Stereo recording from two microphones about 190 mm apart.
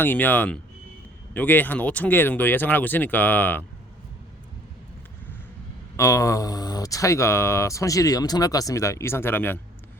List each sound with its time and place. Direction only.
0.0 s speech: 10° left (ahead or behind)
6.0 s speech: 15° left (ahead or behind)